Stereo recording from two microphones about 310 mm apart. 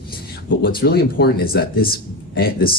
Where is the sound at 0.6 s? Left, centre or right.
Left.